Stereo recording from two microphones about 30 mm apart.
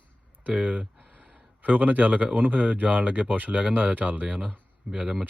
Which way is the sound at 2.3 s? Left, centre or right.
Right.